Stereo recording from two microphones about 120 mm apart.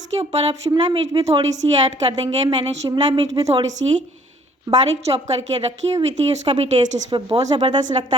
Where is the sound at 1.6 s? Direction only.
45° right (ahead or behind).